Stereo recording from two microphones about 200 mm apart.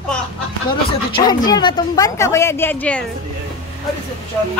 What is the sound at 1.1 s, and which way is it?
A woman's voice, 20° left (ahead or behind).